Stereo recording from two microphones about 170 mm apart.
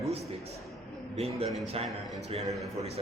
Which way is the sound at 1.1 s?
35° right (ahead or behind).